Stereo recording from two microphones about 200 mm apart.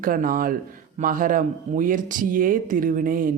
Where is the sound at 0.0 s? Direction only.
45° right (ahead or behind).